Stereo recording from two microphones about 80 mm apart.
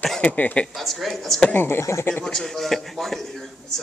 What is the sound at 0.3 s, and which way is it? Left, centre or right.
Speech, left.